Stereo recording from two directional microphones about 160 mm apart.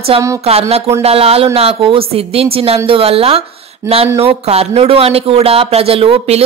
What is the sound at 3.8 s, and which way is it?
Speech, 15° right (ahead or behind).